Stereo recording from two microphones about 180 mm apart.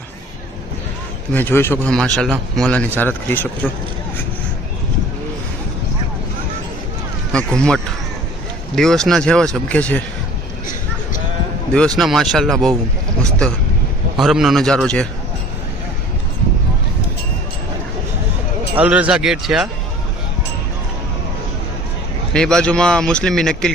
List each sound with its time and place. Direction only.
1.3 s speech: 10° left (ahead or behind)
7.3 s speech: 5° left (ahead or behind)
11.9 s speech: centre (ahead or behind)
14.2 s speech: centre (ahead or behind)
18.8 s speech: 10° right (ahead or behind)
22.3 s speech: 5° left (ahead or behind)